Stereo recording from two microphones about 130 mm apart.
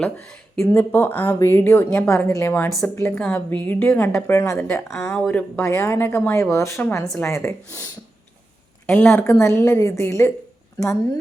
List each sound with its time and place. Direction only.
0.6 s a woman's voice: 15° left (ahead or behind)
8.9 s a woman's voice: 10° left (ahead or behind)